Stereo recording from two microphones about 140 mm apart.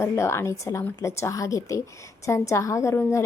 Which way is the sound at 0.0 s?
20° left (ahead or behind).